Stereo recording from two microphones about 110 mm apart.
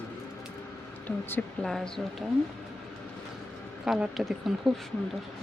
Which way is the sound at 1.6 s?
5° left (ahead or behind).